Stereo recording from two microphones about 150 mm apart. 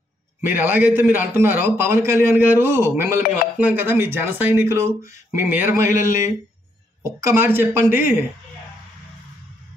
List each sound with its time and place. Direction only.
0.5 s a man's voice: 10° right (ahead or behind)